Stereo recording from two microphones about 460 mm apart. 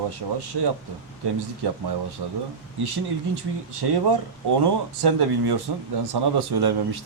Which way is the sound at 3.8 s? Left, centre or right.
Right.